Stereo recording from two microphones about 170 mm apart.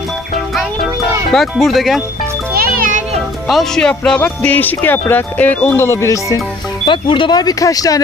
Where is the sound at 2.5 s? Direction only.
60° right (ahead or behind).